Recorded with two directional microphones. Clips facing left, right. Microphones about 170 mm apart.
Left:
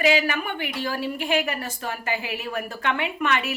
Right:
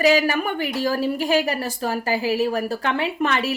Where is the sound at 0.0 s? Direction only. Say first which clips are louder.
Right 4 dB; 40° right (ahead or behind).